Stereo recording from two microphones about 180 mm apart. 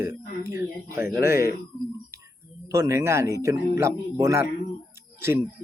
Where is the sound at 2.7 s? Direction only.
15° right (ahead or behind).